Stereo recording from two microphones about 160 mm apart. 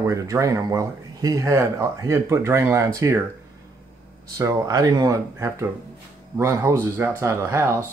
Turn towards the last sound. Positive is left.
turn(degrees=-15)  # may be behind; listen again after turning